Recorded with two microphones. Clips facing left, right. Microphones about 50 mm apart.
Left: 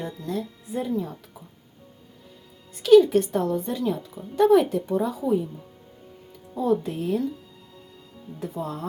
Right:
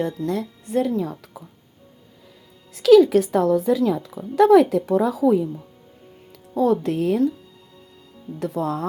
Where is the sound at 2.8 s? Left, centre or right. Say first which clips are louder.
Right 3 dB; right.